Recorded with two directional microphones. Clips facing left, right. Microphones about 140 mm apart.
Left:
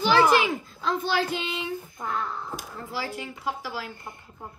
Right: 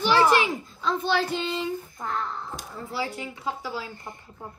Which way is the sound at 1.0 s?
25° right (ahead or behind).